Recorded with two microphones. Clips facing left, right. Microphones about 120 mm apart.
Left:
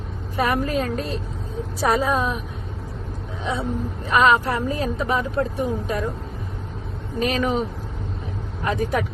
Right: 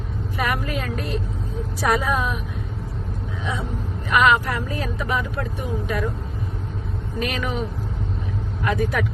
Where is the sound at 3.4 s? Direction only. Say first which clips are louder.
Left 5 dB; 30° left (ahead or behind).